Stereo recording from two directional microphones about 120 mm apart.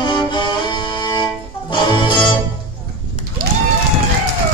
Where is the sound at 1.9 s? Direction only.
45° left (ahead or behind).